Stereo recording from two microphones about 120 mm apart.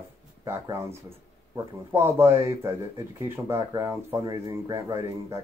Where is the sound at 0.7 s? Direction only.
20° right (ahead or behind).